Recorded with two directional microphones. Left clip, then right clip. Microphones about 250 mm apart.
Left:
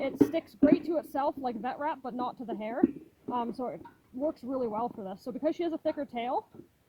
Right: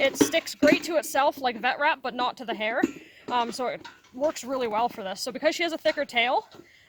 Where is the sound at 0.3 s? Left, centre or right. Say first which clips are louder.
Right 5 dB; centre.